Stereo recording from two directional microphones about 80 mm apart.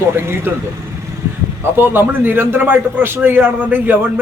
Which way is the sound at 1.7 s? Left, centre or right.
Right.